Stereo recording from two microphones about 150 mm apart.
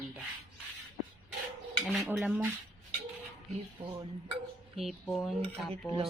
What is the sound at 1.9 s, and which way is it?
Speech, centre (ahead or behind).